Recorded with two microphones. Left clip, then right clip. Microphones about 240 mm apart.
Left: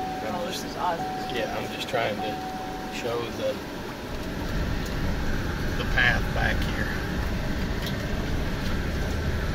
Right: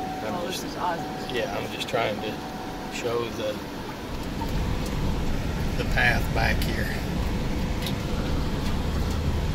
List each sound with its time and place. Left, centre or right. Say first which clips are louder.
5.9 s speech: even; centre